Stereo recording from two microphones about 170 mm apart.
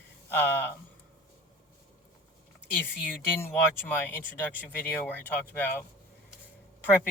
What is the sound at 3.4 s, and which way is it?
Speech, 10° left (ahead or behind).